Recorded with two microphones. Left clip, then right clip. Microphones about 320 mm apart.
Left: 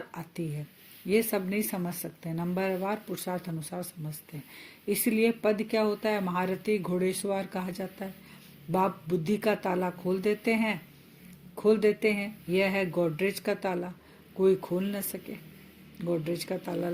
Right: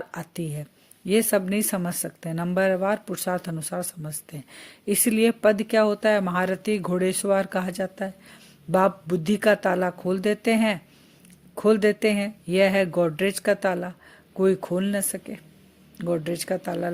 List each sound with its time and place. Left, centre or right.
0.2 s speech: right